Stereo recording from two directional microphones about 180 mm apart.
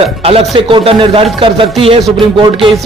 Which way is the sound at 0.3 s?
30° right (ahead or behind).